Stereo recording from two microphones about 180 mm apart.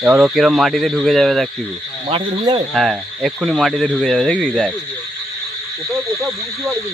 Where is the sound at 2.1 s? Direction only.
25° right (ahead or behind).